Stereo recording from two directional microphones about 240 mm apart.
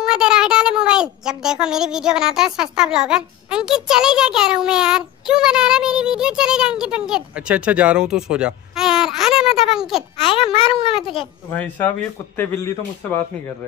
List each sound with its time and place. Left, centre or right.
0.0 s speech: centre
10.2 s a child's voice: left
11.0 s speech: centre